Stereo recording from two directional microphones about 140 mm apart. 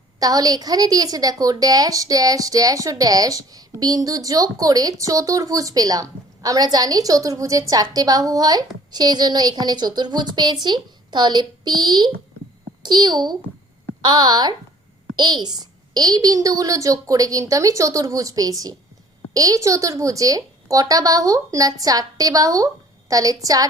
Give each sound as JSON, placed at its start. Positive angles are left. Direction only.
{"t": 0.2, "sound": "a woman's voice", "side_deg": -25}